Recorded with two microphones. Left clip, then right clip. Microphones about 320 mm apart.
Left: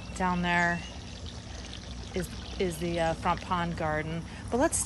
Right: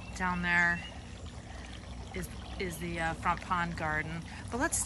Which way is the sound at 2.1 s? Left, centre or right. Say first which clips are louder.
Left 7 dB; centre.